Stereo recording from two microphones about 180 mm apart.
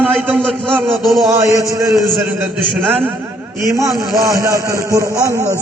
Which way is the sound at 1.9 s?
Centre (ahead or behind).